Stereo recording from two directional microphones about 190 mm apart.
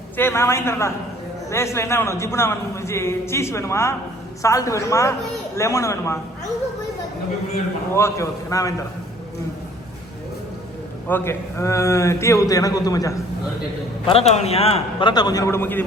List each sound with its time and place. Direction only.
0.2 s a man's voice: 15° left (ahead or behind)
7.9 s a man's voice: 15° left (ahead or behind)
11.1 s a man's voice: 10° left (ahead or behind)
14.1 s a man's voice: 35° left (ahead or behind); by 15.8 s 10° left (ahead or behind)